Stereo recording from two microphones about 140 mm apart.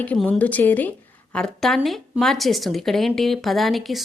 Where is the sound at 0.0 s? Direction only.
10° left (ahead or behind).